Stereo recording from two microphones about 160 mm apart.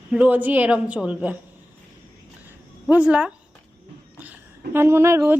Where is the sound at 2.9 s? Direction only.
5° right (ahead or behind).